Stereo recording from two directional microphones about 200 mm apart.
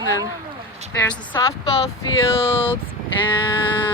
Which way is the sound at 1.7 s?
30° left (ahead or behind).